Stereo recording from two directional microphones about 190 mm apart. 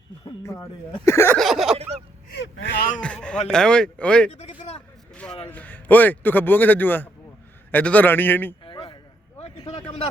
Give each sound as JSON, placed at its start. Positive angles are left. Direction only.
{"t": 0.3, "sound": "a man's voice", "side_deg": 15}
{"t": 1.4, "sound": "speech", "side_deg": 0}
{"t": 1.7, "sound": "a sound", "side_deg": -35}
{"t": 2.3, "sound": "speech", "side_deg": 70}
{"t": 2.7, "sound": "a man's voice", "side_deg": 45}
{"t": 3.0, "sound": "speech", "side_deg": 5}
{"t": 4.3, "sound": "a man's voice", "side_deg": 35}
{"t": 5.1, "sound": "a man's voice", "side_deg": 5}
{"t": 8.6, "sound": "a sound", "side_deg": 25}